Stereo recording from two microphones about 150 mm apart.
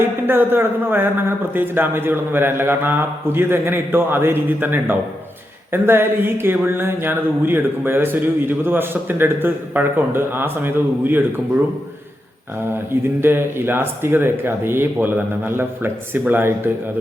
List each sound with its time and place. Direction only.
0.0 s speech: 15° right (ahead or behind)
12.7 s speech: 15° right (ahead or behind)